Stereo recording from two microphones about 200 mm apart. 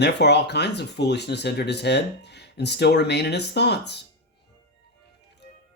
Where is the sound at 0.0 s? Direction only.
55° left (ahead or behind).